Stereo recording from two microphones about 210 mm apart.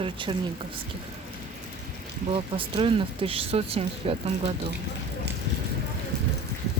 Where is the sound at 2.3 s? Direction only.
25° right (ahead or behind).